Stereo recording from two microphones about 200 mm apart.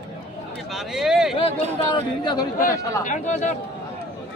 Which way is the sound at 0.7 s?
Centre (ahead or behind).